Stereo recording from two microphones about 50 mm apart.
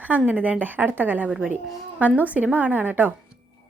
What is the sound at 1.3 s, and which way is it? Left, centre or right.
A woman's voice, right.